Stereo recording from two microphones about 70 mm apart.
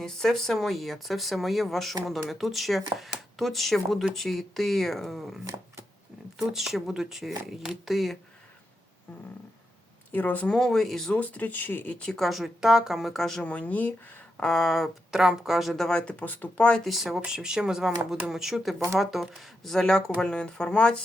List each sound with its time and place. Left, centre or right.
0.0 s speech: centre
6.5 s speech: centre
10.1 s speech: left
10.5 s speech: centre
11.2 s speech: left
11.9 s speech: centre
12.2 s speech: centre
13.4 s speech: centre
14.4 s speech: centre; by 16.6 s left
16.8 s speech: centre